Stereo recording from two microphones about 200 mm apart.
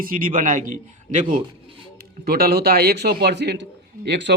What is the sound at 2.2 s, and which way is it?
A man's voice, 50° right (ahead or behind).